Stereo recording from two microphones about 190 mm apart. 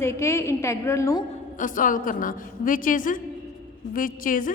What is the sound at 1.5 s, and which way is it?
A woman's voice, 45° left (ahead or behind).